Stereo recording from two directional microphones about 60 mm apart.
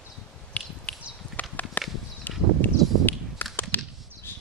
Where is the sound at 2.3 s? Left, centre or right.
Left.